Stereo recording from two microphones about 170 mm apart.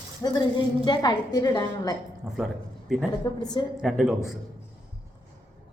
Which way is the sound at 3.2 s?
20° left (ahead or behind).